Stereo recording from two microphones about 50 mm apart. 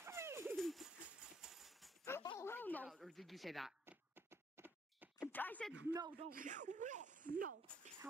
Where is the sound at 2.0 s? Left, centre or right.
Left.